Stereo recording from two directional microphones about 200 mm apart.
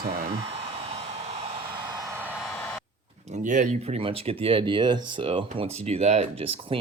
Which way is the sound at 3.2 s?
35° right (ahead or behind).